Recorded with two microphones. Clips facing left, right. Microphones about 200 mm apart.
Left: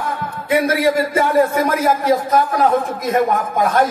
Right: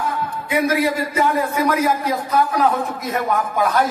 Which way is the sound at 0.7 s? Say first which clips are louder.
Left 3 dB; 45° left (ahead or behind).